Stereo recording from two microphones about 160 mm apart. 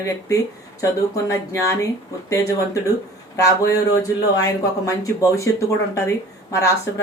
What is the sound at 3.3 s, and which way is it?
Speech, 20° left (ahead or behind).